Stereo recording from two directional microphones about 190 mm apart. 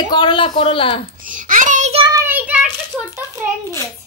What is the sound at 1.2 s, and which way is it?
Speech, 45° right (ahead or behind).